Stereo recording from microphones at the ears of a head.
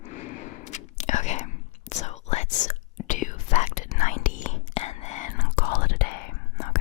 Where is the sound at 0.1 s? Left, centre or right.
Left.